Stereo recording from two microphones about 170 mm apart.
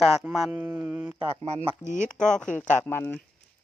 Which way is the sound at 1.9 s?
45° left (ahead or behind).